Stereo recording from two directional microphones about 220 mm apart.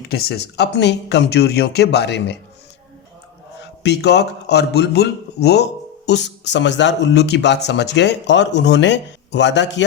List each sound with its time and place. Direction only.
0.1 s speech: 45° left (ahead or behind)
3.6 s speech: 50° left (ahead or behind)